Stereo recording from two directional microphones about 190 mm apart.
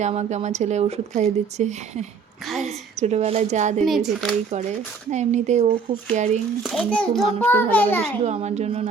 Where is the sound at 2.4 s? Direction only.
Centre (ahead or behind).